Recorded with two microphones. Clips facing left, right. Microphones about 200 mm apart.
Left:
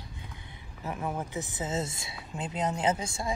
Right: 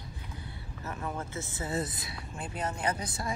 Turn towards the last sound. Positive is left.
turn(degrees=20)  # may be behind; listen again after turning